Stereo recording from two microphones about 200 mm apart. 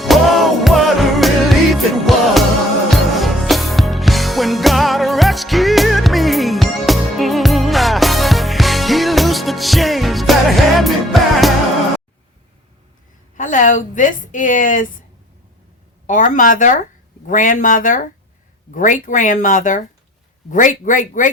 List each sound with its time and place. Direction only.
0.0 s music: centre (ahead or behind)
13.3 s a woman's voice: 40° left (ahead or behind)
16.0 s speech: 40° left (ahead or behind)